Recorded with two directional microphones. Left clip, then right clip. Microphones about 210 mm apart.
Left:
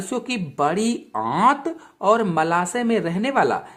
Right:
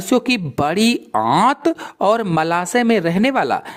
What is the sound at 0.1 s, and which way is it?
Speech, 35° right (ahead or behind).